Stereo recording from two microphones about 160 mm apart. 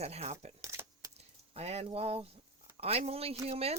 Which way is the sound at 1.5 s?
40° right (ahead or behind).